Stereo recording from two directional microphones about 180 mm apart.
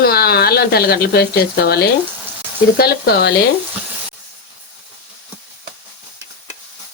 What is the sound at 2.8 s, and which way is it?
Speech, 60° left (ahead or behind).